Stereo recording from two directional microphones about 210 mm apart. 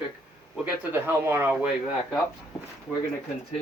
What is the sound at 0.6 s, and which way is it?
Speech, 10° right (ahead or behind).